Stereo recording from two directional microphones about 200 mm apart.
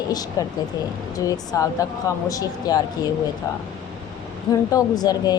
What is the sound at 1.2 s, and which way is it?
A woman's voice, 15° left (ahead or behind).